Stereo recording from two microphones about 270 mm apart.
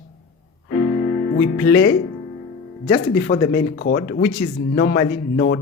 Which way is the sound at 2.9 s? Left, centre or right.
Left.